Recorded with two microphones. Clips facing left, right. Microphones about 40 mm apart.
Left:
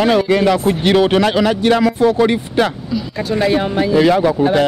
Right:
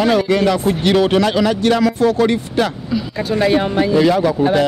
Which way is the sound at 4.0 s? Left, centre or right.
Left.